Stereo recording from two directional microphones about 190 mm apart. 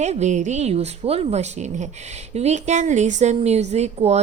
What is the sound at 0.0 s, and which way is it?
Speech, 35° right (ahead or behind).